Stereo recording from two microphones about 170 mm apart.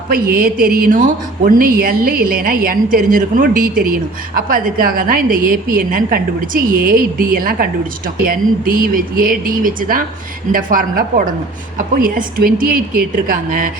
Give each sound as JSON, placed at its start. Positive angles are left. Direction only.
{"t": 0.1, "sound": "a woman's voice", "side_deg": -60}